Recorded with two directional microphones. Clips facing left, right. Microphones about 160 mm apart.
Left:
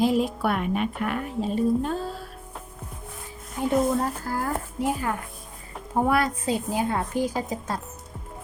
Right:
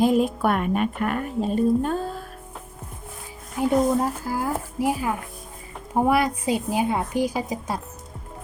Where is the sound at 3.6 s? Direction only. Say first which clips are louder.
Right 3 dB; 10° right (ahead or behind).